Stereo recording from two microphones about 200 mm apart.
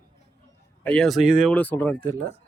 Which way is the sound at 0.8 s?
5° left (ahead or behind).